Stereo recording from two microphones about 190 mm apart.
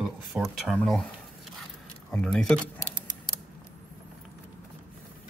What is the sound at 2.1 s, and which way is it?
Speech, 5° left (ahead or behind).